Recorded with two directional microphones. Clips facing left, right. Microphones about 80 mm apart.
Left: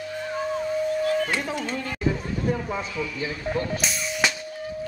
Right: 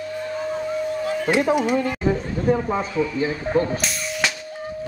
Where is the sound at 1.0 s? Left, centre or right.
Centre.